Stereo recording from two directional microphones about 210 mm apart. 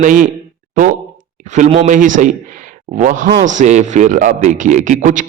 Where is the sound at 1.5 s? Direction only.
35° right (ahead or behind).